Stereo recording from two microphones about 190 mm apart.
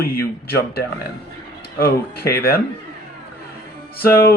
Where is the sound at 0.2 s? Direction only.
55° left (ahead or behind).